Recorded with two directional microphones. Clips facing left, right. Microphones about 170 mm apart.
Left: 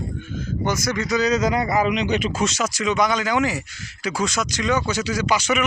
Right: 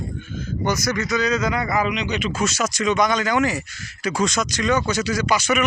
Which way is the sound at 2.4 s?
15° left (ahead or behind).